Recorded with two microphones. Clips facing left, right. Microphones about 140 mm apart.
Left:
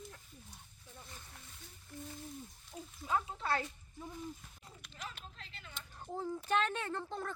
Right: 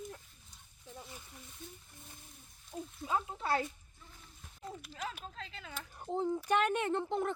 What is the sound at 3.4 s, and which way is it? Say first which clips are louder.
Speech: right 3 dB; 10° right (ahead or behind).